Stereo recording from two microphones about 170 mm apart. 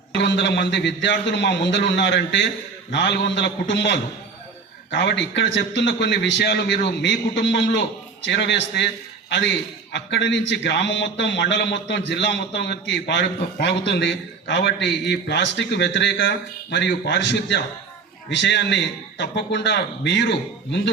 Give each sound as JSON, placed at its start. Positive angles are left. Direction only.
{"t": 0.1, "sound": "a man's voice", "side_deg": 85}